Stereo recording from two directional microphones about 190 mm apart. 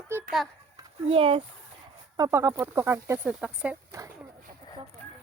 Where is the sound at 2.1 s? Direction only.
15° right (ahead or behind).